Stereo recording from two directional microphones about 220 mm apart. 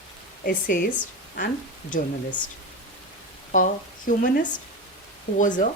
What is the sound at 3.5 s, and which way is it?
Speech, 35° left (ahead or behind).